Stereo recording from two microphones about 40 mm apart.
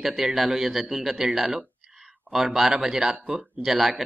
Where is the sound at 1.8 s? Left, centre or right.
Centre.